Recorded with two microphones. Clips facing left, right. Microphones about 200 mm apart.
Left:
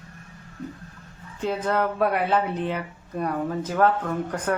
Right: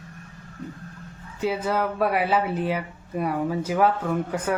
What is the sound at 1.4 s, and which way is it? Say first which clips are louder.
Speech: even; 5° right (ahead or behind).